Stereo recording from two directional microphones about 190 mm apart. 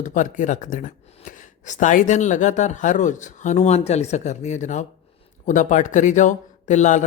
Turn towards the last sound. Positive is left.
turn(degrees=40)  # may be behind; listen again after turning